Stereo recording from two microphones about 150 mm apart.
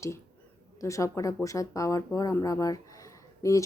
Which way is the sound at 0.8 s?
20° left (ahead or behind).